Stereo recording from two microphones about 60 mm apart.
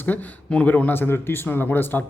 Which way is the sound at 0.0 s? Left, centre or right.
Left.